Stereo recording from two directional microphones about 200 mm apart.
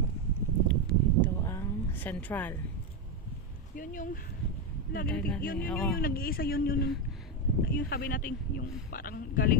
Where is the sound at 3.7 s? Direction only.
45° left (ahead or behind).